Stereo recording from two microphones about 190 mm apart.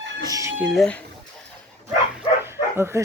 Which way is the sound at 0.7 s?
5° left (ahead or behind).